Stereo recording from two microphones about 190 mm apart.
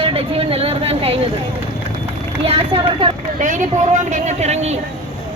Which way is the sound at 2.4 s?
30° right (ahead or behind).